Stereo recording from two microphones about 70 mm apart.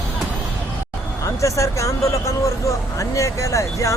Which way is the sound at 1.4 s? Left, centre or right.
Left.